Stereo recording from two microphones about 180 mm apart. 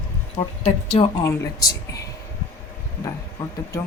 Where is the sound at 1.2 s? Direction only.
15° left (ahead or behind).